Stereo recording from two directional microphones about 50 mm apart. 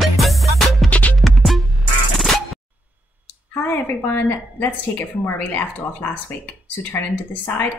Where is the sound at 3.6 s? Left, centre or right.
Left.